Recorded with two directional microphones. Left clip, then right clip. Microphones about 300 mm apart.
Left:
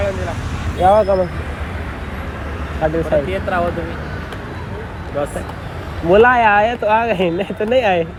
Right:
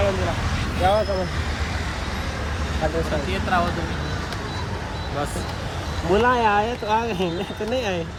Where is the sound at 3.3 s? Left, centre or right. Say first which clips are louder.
Left 3 dB; centre.